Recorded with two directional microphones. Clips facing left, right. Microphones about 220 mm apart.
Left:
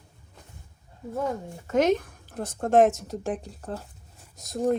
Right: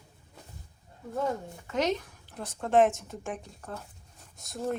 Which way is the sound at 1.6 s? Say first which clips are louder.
Left 7 dB; 50° left (ahead or behind).